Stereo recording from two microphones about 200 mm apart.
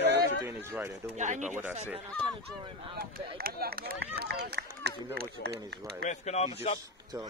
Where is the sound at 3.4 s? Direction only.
50° right (ahead or behind).